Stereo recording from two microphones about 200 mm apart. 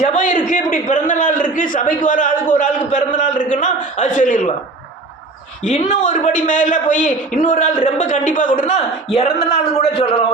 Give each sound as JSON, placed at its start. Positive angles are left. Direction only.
{"t": 0.0, "sound": "a man's voice", "side_deg": 35}
{"t": 5.6, "sound": "a man's voice", "side_deg": 35}